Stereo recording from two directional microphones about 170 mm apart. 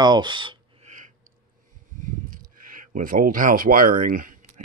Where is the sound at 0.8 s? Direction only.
50° right (ahead or behind).